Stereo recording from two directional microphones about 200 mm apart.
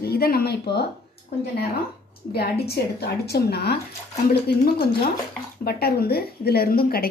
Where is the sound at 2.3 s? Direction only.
50° left (ahead or behind).